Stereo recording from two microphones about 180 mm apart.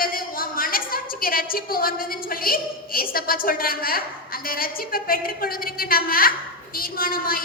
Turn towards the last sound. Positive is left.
turn(degrees=55)  # may be behind; listen again after turning